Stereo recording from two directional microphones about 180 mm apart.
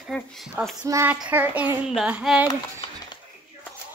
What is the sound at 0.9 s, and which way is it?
Speech, 15° right (ahead or behind).